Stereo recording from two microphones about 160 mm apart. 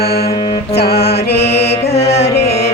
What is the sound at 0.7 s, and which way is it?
Music, 85° left.